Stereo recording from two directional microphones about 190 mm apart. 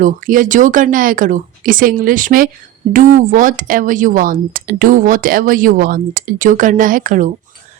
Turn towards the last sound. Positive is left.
turn(degrees=-40)  # may be behind; listen again after turning